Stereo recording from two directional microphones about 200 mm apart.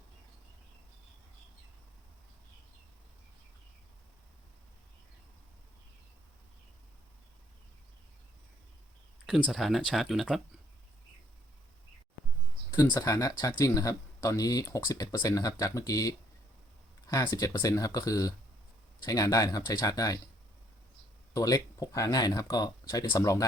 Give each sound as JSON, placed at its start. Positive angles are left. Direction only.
{"t": 9.5, "sound": "speech", "side_deg": 0}
{"t": 12.7, "sound": "speech", "side_deg": 15}
{"t": 21.3, "sound": "speech", "side_deg": 15}